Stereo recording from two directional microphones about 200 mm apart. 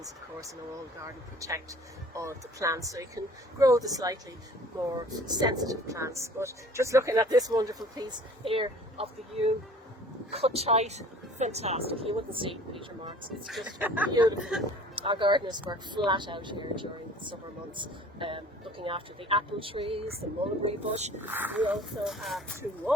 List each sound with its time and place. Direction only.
1.4 s speech: 15° right (ahead or behind)
13.4 s speech: centre (ahead or behind)
14.1 s speech: 20° right (ahead or behind)
21.2 s speech: 10° right (ahead or behind)